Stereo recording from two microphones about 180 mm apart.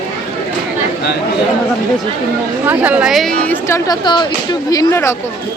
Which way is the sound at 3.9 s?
25° left (ahead or behind).